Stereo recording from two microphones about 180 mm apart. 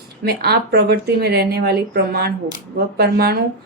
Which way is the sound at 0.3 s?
65° right (ahead or behind).